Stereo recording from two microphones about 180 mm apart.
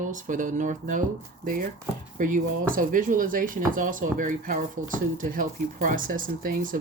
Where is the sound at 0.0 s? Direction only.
45° right (ahead or behind).